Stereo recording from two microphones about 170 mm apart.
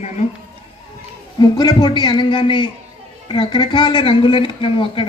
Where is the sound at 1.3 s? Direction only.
25° left (ahead or behind).